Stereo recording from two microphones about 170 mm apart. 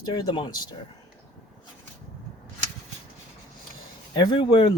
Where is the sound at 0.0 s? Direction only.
25° left (ahead or behind).